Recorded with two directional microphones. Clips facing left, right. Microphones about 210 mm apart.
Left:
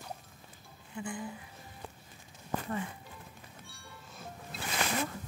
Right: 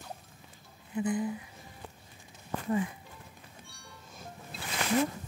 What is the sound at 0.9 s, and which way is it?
Speech, 20° right (ahead or behind).